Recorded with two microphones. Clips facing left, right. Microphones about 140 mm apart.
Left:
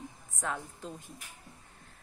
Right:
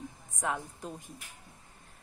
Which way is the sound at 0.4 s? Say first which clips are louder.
Right 2 dB; 15° right (ahead or behind).